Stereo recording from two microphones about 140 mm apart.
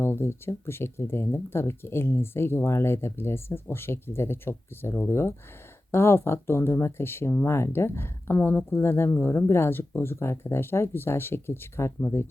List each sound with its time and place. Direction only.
0.0 s speech: 15° left (ahead or behind)